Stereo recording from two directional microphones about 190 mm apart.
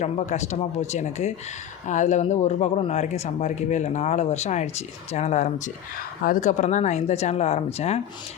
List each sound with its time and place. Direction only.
0.0 s speech: 35° left (ahead or behind)